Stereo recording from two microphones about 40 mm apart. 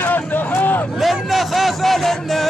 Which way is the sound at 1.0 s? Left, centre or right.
Centre.